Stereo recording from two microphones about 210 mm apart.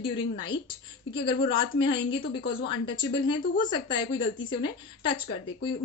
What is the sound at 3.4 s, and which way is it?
Speech, 40° left (ahead or behind).